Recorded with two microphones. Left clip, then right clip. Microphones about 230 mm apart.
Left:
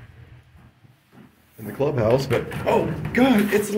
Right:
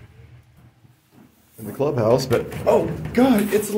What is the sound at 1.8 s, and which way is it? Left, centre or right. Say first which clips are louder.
Speech: right 2 dB; centre.